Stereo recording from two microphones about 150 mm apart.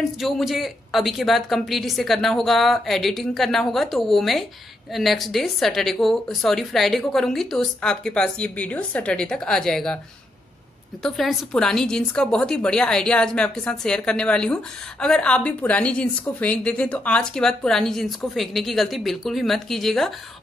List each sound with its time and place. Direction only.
0.2 s a woman's voice: centre (ahead or behind)
11.0 s a woman's voice: centre (ahead or behind)